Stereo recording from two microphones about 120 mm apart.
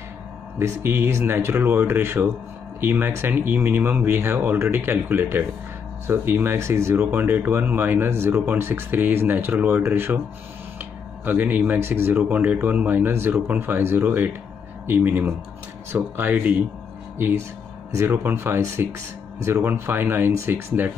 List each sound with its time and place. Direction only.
0.8 s speech: 20° right (ahead or behind)